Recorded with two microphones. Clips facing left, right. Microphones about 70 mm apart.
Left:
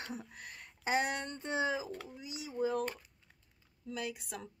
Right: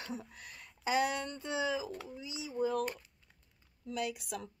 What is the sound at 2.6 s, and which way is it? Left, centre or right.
Speech, centre.